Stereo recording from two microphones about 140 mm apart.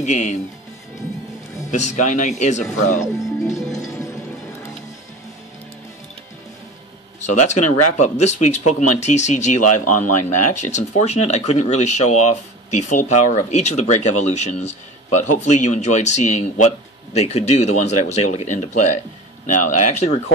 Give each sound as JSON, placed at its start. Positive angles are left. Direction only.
{"t": 0.0, "sound": "speech", "side_deg": 60}
{"t": 1.7, "sound": "speech", "side_deg": 60}
{"t": 3.0, "sound": "speech", "side_deg": 20}
{"t": 3.7, "sound": "music", "side_deg": 20}
{"t": 7.2, "sound": "speech", "side_deg": 55}